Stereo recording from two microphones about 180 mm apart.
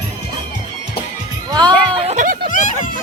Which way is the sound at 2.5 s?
45° left (ahead or behind).